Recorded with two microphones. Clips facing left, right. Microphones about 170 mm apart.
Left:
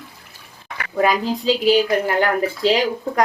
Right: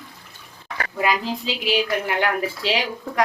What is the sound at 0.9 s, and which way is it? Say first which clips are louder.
A woman's voice: left 5 dB; 45° left (ahead or behind).